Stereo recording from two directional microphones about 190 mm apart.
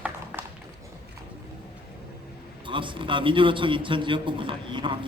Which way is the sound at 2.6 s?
25° right (ahead or behind).